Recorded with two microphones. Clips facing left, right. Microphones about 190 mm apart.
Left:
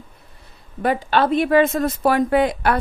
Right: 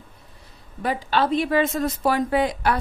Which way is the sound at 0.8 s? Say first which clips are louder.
Left 4 dB; 55° left (ahead or behind).